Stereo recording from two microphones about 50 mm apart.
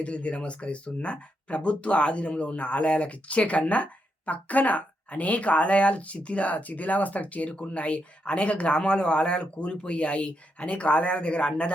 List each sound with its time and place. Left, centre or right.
0.0 s speech: left